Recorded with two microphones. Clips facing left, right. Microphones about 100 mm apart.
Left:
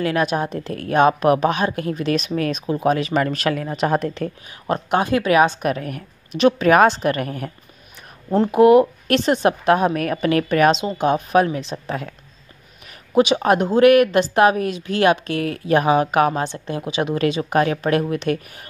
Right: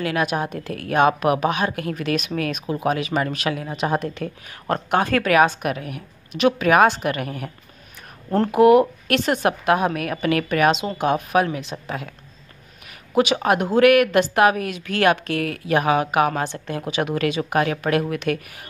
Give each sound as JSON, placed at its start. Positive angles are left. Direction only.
{"t": 0.0, "sound": "speech", "side_deg": 30}
{"t": 4.9, "sound": "a woman's voice", "side_deg": 20}
{"t": 6.3, "sound": "speech", "side_deg": 30}
{"t": 8.5, "sound": "a woman's voice", "side_deg": 25}
{"t": 11.7, "sound": "speech", "side_deg": 0}
{"t": 13.2, "sound": "a woman's voice", "side_deg": 25}